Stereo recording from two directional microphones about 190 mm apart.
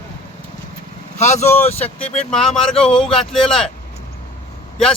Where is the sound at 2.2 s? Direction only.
5° left (ahead or behind).